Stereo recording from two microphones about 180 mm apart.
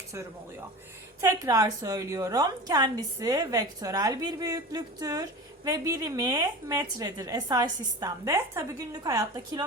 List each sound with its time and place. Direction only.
1.2 s a woman's voice: 20° right (ahead or behind)